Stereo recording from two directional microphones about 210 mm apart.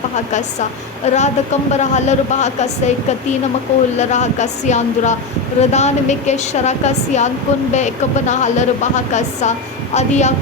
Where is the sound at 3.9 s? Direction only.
35° left (ahead or behind).